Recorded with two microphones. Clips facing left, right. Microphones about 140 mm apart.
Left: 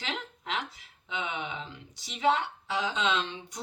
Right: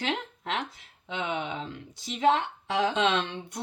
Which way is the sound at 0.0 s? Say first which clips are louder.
Right 6 dB; 55° right (ahead or behind).